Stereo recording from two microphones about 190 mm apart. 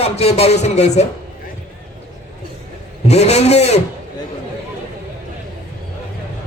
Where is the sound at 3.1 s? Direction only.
35° left (ahead or behind).